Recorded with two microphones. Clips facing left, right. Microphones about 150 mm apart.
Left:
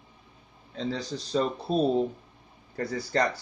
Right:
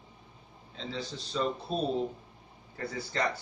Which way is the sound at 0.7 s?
40° left (ahead or behind).